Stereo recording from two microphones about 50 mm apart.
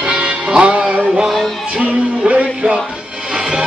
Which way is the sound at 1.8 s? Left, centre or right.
Right.